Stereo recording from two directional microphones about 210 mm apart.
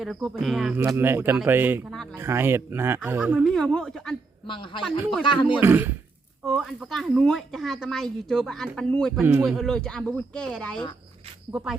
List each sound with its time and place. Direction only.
0.0 s speech: centre (ahead or behind)
3.5 s a woman's voice: 5° left (ahead or behind)
4.4 s speech: 25° left (ahead or behind)
5.6 s speech: 10° right (ahead or behind)
6.4 s a woman's voice: centre (ahead or behind)